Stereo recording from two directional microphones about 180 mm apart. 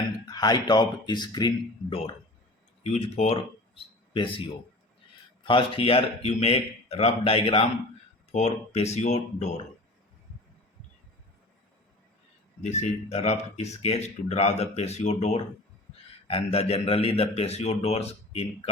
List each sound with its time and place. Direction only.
0.3 s speech: 20° left (ahead or behind); by 9.5 s 40° left (ahead or behind)
12.6 s speech: 40° left (ahead or behind)